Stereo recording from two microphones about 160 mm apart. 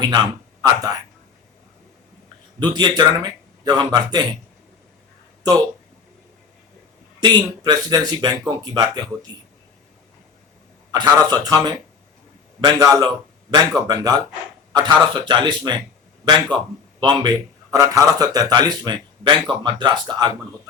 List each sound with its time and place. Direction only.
0.0 s speech: 25° right (ahead or behind)
2.6 s a man's voice: 25° right (ahead or behind)
5.4 s a sound: 25° right (ahead or behind)
7.2 s a man's voice: 25° right (ahead or behind)
10.9 s a man's voice: 25° right (ahead or behind)
17.0 s a man's voice: 25° right (ahead or behind)